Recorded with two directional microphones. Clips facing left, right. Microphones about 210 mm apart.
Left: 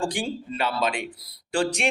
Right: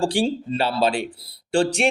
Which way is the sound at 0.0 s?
30° right (ahead or behind).